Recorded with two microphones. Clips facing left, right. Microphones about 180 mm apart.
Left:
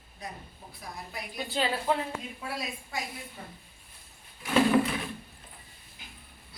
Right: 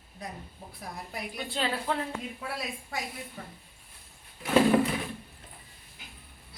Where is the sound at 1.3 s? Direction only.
5° left (ahead or behind).